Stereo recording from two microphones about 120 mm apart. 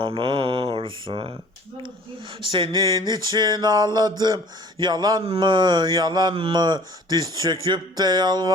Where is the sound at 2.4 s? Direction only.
45° right (ahead or behind).